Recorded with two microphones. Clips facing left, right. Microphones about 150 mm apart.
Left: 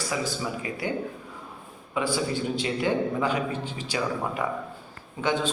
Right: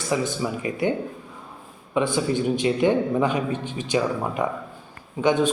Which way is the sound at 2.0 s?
20° right (ahead or behind).